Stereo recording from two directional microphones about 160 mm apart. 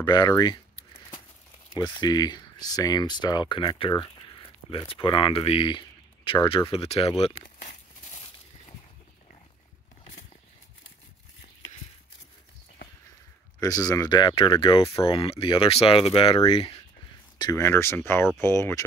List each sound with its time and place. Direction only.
0.0 s speech: 25° left (ahead or behind)
1.8 s speech: 25° left (ahead or behind)
7.6 s a sound: 45° left (ahead or behind)
13.6 s speech: 20° left (ahead or behind)
17.4 s speech: 20° left (ahead or behind)